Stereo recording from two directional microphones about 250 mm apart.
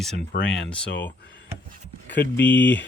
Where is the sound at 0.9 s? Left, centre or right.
Left.